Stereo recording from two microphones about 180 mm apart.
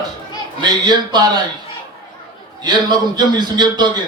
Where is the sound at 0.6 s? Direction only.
25° right (ahead or behind).